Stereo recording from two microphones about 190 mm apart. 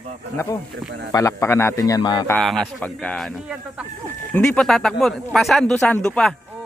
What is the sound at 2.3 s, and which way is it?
Speech, 5° left (ahead or behind).